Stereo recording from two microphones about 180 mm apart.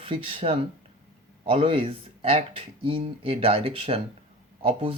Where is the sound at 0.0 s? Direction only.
30° right (ahead or behind).